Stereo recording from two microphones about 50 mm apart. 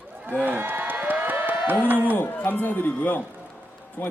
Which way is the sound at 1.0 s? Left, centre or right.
Right.